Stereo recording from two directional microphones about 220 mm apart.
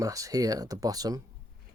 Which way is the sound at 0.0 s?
15° right (ahead or behind).